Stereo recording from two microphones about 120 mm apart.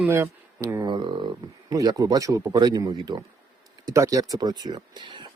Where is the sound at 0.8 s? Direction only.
40° right (ahead or behind).